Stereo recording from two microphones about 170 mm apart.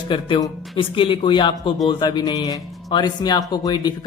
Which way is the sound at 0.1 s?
25° left (ahead or behind).